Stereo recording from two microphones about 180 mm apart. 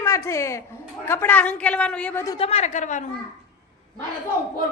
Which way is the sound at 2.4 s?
35° left (ahead or behind).